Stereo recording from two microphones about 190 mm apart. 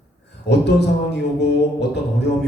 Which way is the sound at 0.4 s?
65° left (ahead or behind).